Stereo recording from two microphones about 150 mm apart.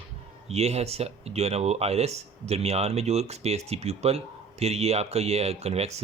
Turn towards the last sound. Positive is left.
turn(degrees=-45)  # may be behind; listen again after turning